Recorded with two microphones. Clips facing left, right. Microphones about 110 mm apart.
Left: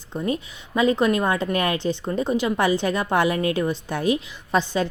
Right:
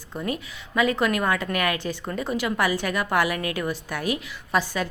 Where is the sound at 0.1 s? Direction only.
20° left (ahead or behind).